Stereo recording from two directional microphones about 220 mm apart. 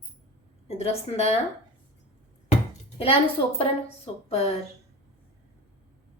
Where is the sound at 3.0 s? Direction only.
25° left (ahead or behind).